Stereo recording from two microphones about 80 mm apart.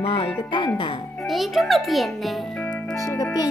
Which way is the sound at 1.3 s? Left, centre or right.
Centre.